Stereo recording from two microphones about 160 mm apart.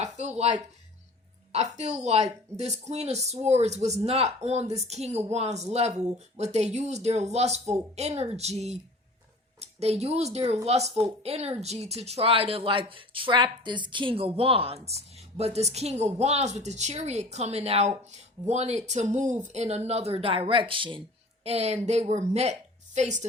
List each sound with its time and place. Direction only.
0.0 s a woman's voice: 45° right (ahead or behind)